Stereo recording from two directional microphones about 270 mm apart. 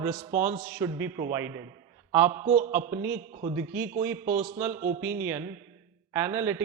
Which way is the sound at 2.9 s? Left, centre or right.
Centre.